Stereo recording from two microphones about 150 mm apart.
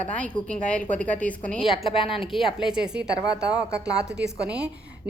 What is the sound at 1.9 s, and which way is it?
Speech, 35° left (ahead or behind).